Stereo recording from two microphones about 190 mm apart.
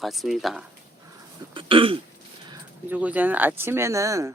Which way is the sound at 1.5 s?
25° right (ahead or behind).